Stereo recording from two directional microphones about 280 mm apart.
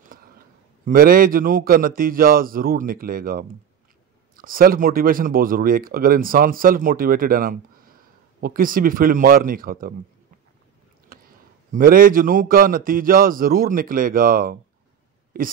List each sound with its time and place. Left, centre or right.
0.8 s speech: right
11.1 s a sound: right
11.7 s speech: right